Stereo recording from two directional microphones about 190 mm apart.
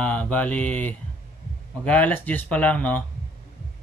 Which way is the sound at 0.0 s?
5° left (ahead or behind).